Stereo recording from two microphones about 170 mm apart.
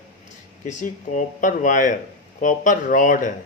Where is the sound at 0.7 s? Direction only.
45° left (ahead or behind).